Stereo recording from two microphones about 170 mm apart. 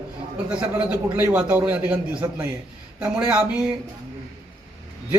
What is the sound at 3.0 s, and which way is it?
Speech, 10° right (ahead or behind).